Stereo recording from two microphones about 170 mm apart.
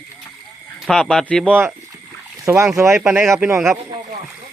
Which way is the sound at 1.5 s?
10° right (ahead or behind).